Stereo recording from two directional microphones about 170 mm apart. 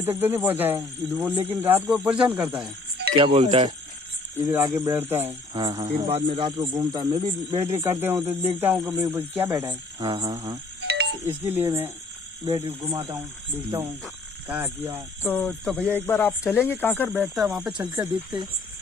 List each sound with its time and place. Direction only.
0.0 s speech: 10° right (ahead or behind)
3.3 s speech: 30° right (ahead or behind)
4.4 s speech: 15° right (ahead or behind)
5.5 s speech: 25° right (ahead or behind)
5.9 s speech: 35° right (ahead or behind); by 9.8 s 10° right (ahead or behind)
9.9 s music: 30° right (ahead or behind)
10.9 s music: 80° right
11.2 s speech: 15° right (ahead or behind)
14.5 s speech: 10° right (ahead or behind)
15.2 s speech: 10° left (ahead or behind)
17.4 s speech: centre (ahead or behind)